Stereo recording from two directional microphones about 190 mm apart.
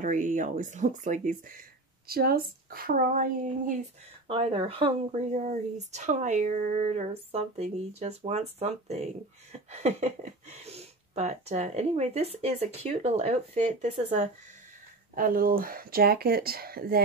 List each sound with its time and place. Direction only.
0.0 s speech: 40° right (ahead or behind)
2.0 s speech: 55° right (ahead or behind)
4.3 s speech: 30° right (ahead or behind)
5.3 s speech: 40° right (ahead or behind)
15.1 s speech: 45° right (ahead or behind)